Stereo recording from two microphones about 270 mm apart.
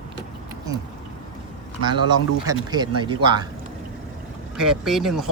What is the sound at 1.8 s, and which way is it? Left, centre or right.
Speech, centre.